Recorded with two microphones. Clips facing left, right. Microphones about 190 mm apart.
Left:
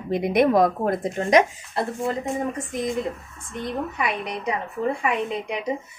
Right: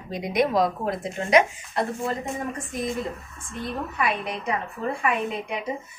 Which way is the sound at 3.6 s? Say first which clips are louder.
Left 2 dB; 20° left (ahead or behind).